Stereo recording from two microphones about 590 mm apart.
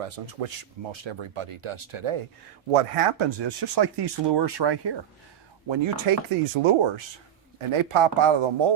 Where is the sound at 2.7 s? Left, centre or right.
Right.